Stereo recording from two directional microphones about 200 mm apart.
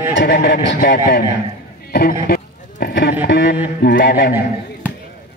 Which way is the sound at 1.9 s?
50° left (ahead or behind).